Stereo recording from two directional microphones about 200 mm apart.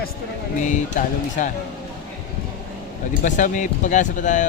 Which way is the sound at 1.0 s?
45° left (ahead or behind).